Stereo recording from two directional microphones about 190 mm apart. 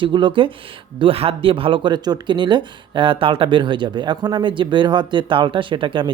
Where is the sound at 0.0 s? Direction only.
25° right (ahead or behind).